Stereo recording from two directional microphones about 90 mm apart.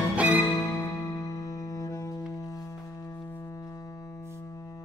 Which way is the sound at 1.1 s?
40° left (ahead or behind).